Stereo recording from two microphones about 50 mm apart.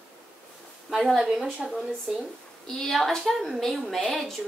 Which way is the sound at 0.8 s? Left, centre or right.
Centre.